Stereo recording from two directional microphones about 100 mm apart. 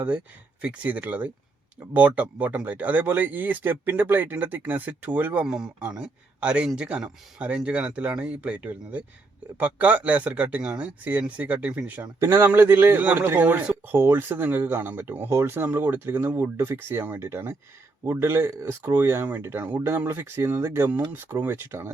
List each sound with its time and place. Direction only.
0.6 s speech: 15° right (ahead or behind)
12.2 s speech: 25° right (ahead or behind)